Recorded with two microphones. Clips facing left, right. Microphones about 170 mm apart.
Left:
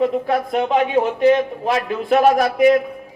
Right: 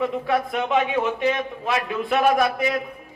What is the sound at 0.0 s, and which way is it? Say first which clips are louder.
A man's voice: left 4 dB; 35° left (ahead or behind).